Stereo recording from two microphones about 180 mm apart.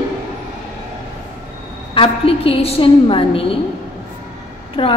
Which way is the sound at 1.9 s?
30° left (ahead or behind).